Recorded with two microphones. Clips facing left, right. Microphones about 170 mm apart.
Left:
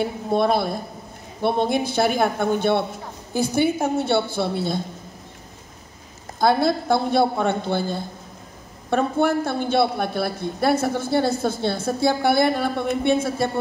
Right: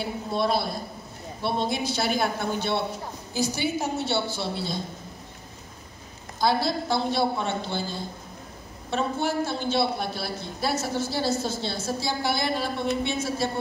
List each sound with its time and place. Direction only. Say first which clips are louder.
0.0 s a woman's voice: left 6 dB; 55° left (ahead or behind)
6.4 s a woman's voice: left 5 dB; 55° left (ahead or behind)